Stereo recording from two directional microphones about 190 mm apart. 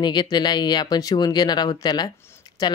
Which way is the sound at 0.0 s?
20° left (ahead or behind).